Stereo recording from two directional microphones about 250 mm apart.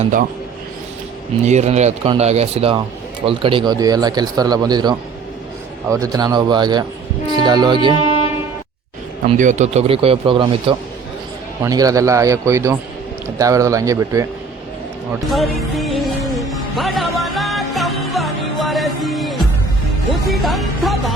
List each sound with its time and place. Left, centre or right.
0.0 s speech: right
1.5 s speech: right
9.4 s speech: right; by 14.3 s centre
15.3 s music: centre